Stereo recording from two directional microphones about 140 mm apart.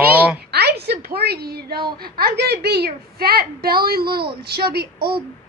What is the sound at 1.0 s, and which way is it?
A woman's voice, 90° right.